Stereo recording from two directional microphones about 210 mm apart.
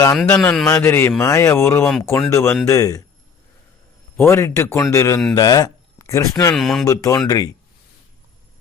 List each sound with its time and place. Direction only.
0.0 s speech: 10° left (ahead or behind)
4.2 s speech: 10° left (ahead or behind)
6.6 s speech: centre (ahead or behind)
6.8 s speech: 15° left (ahead or behind)